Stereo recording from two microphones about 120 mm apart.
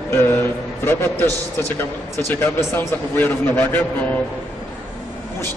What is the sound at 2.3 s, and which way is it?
A man's voice, 20° left (ahead or behind).